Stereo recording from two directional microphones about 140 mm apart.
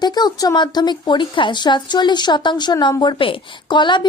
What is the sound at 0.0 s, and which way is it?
A woman's voice, 30° left (ahead or behind).